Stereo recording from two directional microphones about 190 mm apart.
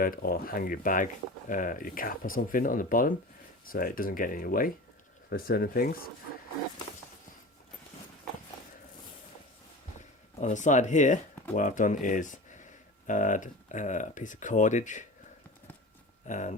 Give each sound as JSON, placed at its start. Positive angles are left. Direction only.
{"t": 0.0, "sound": "speech", "side_deg": 50}
{"t": 10.4, "sound": "speech", "side_deg": 40}
{"t": 16.2, "sound": "speech", "side_deg": 40}